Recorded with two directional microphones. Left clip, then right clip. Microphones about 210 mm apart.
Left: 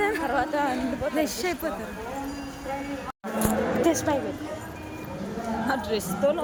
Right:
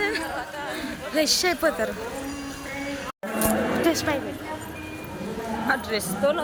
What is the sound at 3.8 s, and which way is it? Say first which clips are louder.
Speech: left 1 dB; 30° left (ahead or behind).